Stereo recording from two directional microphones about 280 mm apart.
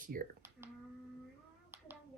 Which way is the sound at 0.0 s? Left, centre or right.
Right.